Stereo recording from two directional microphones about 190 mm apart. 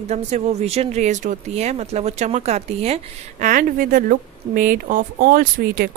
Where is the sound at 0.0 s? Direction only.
35° right (ahead or behind).